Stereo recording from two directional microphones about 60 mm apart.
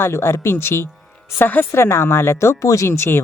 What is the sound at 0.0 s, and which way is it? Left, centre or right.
Speech, left.